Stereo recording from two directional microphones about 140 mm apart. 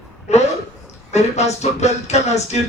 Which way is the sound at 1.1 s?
55° left (ahead or behind).